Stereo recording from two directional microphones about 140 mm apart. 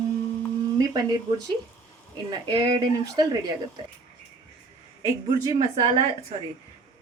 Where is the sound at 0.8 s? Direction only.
25° right (ahead or behind).